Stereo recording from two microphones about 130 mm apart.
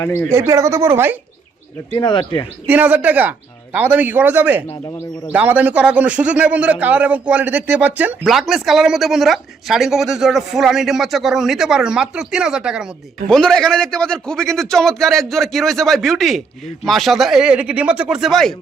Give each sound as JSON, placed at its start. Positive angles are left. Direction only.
{"t": 0.3, "sound": "speech", "side_deg": -20}
{"t": 1.9, "sound": "speech", "side_deg": 35}
{"t": 2.6, "sound": "a man's voice", "side_deg": -15}
{"t": 8.3, "sound": "a man's voice", "side_deg": 0}
{"t": 13.2, "sound": "a man's voice", "side_deg": 5}